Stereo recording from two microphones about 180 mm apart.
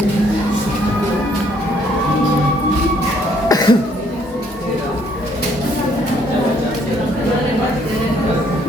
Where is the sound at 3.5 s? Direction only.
20° left (ahead or behind).